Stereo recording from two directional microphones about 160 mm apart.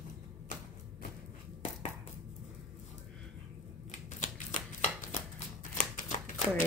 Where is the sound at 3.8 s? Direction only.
50° left (ahead or behind).